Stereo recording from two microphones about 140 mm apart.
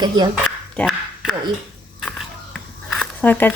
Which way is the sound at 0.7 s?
5° left (ahead or behind).